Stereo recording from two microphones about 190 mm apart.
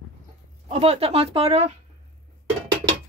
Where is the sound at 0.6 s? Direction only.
30° right (ahead or behind).